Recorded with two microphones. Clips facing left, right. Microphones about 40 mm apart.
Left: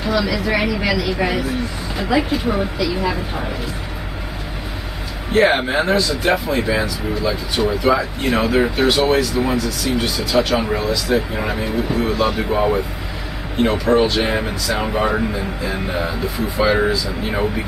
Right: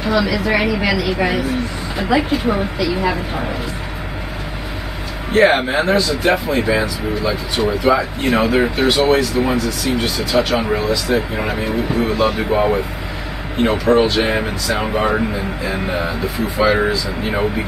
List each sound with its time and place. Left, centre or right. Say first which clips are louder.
0.0 s speech: right 2 dB; centre
5.3 s speech: right 2 dB; centre